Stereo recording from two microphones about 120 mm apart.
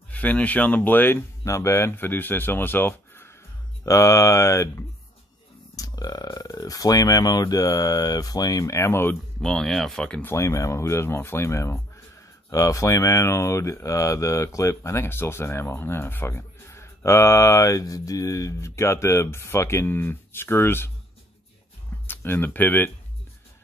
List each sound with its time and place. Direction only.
0.1 s speech: 10° left (ahead or behind)
9.4 s speech: 5° left (ahead or behind)
10.3 s speech: 25° left (ahead or behind)
22.0 s speech: 15° left (ahead or behind)